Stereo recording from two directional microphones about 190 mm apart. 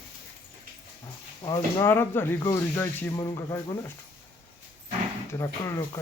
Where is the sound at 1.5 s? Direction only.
10° left (ahead or behind).